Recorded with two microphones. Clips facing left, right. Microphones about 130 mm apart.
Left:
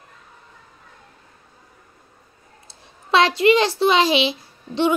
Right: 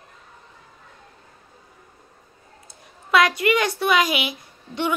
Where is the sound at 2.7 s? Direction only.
30° left (ahead or behind).